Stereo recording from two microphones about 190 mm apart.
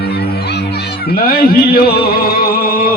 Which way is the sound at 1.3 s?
50° left (ahead or behind).